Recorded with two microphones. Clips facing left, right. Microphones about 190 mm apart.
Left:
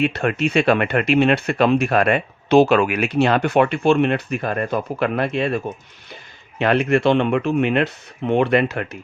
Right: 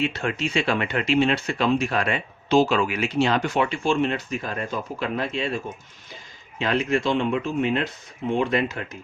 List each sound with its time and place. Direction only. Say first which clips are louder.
0.0 s speech: left 6 dB; 60° left (ahead or behind)